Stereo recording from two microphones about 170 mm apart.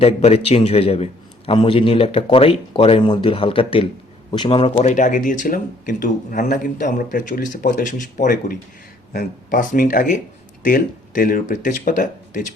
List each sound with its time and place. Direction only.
0.0 s speech: 40° left (ahead or behind)